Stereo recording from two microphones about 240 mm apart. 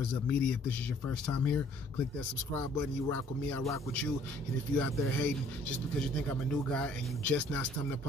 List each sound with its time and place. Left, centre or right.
0.3 s speech: centre
3.1 s speech: centre